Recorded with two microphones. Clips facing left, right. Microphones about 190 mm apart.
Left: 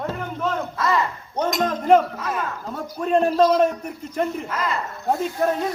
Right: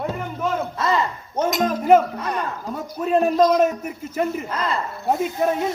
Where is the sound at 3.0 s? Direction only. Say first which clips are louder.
Even; 5° right (ahead or behind).